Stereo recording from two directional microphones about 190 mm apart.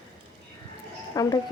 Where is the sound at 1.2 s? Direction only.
20° left (ahead or behind).